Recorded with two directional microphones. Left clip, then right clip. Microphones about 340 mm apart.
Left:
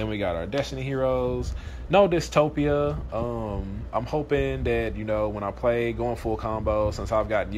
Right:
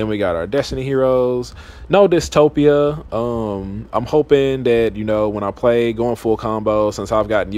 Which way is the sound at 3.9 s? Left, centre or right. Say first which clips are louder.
Right 11 dB; centre.